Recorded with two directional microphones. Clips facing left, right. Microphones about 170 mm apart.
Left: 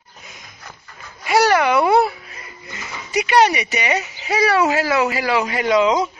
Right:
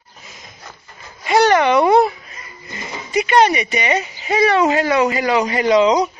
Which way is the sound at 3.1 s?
10° left (ahead or behind).